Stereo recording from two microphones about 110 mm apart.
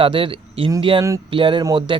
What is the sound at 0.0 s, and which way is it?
Speech, 50° right (ahead or behind).